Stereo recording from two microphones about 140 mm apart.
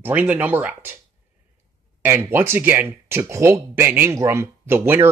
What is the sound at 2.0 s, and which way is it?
Speech, 15° right (ahead or behind).